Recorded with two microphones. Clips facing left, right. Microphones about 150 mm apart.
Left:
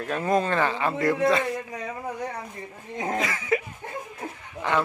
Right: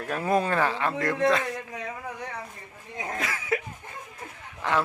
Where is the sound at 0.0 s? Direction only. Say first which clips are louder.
Left 1 dB; 5° right (ahead or behind).